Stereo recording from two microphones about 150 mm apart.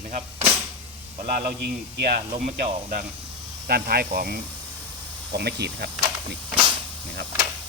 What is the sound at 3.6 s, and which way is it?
Speech, 90° right.